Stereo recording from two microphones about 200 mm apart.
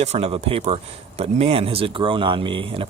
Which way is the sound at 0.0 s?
30° right (ahead or behind).